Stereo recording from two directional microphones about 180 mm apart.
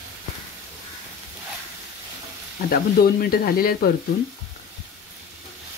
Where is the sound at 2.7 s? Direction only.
55° left (ahead or behind).